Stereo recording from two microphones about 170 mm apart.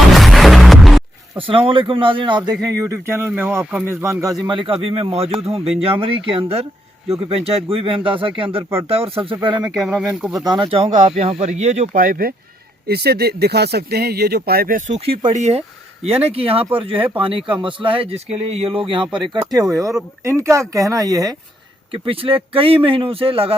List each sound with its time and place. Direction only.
0.1 s music: centre (ahead or behind)
1.4 s speech: 30° right (ahead or behind)
2.8 s speech: 15° right (ahead or behind)
9.7 s speech: 5° right (ahead or behind)
10.4 s speech: 25° right (ahead or behind); by 12.3 s 55° right (ahead or behind)
12.9 s speech: 70° right (ahead or behind); by 21.3 s 20° right (ahead or behind)
21.9 s speech: 30° right (ahead or behind)